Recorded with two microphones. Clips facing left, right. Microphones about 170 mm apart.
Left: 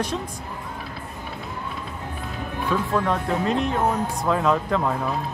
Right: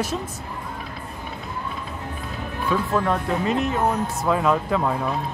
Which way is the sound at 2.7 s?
Centre (ahead or behind).